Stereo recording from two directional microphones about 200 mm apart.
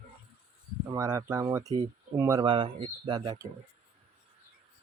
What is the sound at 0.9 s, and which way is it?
Speech, 15° right (ahead or behind).